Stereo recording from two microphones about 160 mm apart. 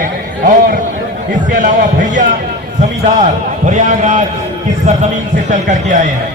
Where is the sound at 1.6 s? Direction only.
50° right (ahead or behind).